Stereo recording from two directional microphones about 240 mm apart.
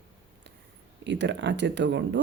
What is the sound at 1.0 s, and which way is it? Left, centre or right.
Speech, right.